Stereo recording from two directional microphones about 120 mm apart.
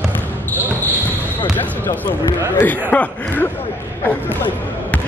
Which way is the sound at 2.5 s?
15° left (ahead or behind).